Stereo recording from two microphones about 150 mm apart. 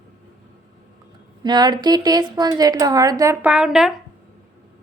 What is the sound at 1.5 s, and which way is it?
A woman's voice, 30° right (ahead or behind).